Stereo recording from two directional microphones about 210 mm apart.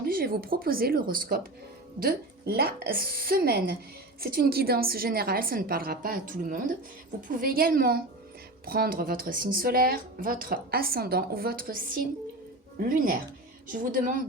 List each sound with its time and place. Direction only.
0.0 s a woman's voice: 45° right (ahead or behind)